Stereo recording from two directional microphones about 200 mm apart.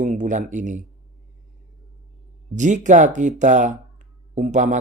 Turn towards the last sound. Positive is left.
turn(degrees=-35)  # may be behind; listen again after turning